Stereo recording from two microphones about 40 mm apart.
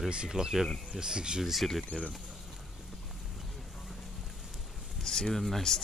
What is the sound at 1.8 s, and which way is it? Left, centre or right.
Speech, left.